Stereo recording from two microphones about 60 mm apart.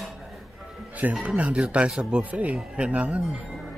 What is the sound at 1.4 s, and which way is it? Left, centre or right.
Speech, centre.